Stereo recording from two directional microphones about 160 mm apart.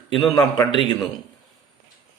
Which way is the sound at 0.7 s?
30° left (ahead or behind).